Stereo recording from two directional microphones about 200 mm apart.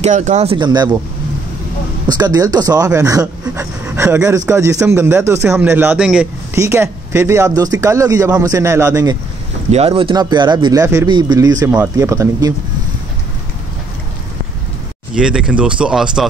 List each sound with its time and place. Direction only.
0.0 s speech: 35° right (ahead or behind)
2.0 s a man's voice: 20° right (ahead or behind)
9.7 s a man's voice: 30° right (ahead or behind); by 12.5 s 15° right (ahead or behind)
15.1 s speech: 5° right (ahead or behind)